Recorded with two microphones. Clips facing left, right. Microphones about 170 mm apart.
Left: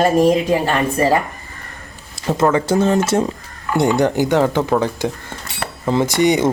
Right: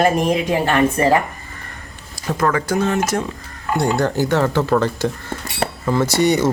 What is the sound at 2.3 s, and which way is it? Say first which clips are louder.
Speech: left 3 dB; 25° left (ahead or behind).